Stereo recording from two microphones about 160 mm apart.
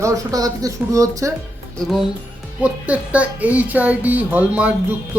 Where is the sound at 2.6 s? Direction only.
10° right (ahead or behind).